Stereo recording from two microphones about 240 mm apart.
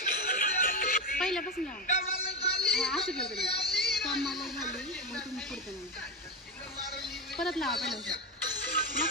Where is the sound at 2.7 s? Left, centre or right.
Centre.